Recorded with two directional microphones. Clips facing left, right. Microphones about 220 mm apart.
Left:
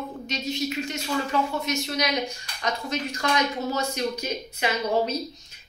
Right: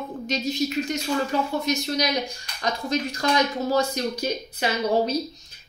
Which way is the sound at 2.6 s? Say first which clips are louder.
Right 3 dB; 35° right (ahead or behind).